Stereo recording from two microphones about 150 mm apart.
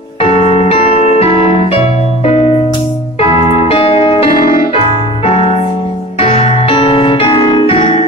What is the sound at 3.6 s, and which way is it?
Music, 40° left (ahead or behind).